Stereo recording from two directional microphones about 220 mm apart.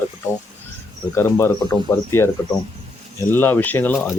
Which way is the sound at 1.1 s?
10° left (ahead or behind).